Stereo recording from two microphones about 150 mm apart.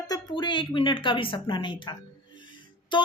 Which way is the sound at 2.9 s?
30° left (ahead or behind).